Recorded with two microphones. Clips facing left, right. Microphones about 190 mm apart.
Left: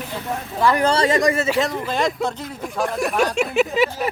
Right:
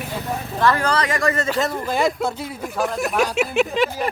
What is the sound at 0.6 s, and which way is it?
Speech, 15° left (ahead or behind).